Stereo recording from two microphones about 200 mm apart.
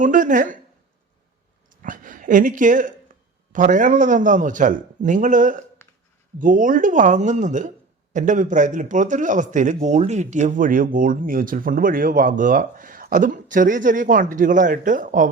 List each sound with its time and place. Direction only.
0.0 s a man's voice: 40° right (ahead or behind)
1.7 s a man's voice: 40° right (ahead or behind)